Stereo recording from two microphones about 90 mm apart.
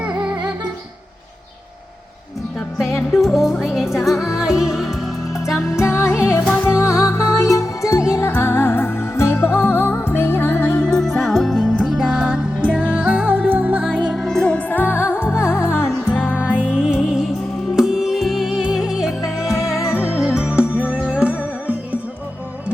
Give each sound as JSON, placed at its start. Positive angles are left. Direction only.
{"t": 0.0, "sound": "music", "side_deg": -10}
{"t": 2.7, "sound": "music", "side_deg": 0}
{"t": 5.5, "sound": "music", "side_deg": 30}
{"t": 10.8, "sound": "music", "side_deg": 5}
{"t": 14.1, "sound": "music", "side_deg": 5}
{"t": 16.4, "sound": "music", "side_deg": -15}
{"t": 19.5, "sound": "music", "side_deg": 35}
{"t": 20.0, "sound": "music", "side_deg": -5}